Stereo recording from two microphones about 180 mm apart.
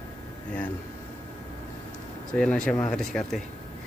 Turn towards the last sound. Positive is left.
turn(degrees=0)  # may be behind; listen again after turning